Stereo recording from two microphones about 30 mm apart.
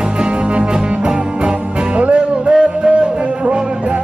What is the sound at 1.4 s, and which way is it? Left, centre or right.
Music, right.